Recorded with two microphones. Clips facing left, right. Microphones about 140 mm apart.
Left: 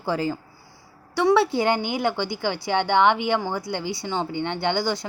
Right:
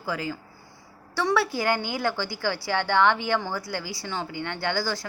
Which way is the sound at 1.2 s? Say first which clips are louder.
Left 6 dB; 20° left (ahead or behind).